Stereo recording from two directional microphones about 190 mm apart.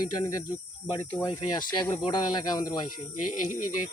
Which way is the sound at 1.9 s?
25° left (ahead or behind).